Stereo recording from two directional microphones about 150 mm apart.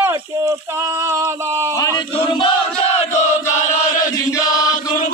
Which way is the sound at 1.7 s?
25° left (ahead or behind).